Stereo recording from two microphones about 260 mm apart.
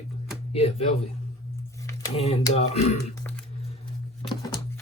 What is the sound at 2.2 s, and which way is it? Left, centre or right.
Speech, left.